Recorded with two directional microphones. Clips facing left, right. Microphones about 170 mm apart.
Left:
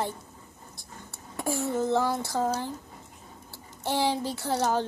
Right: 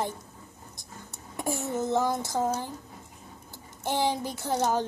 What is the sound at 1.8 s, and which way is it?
Speech, 15° right (ahead or behind).